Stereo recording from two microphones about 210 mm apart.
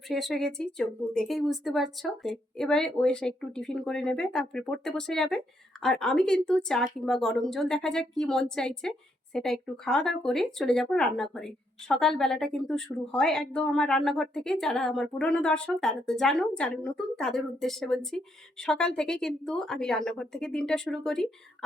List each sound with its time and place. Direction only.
0.1 s speech: centre (ahead or behind)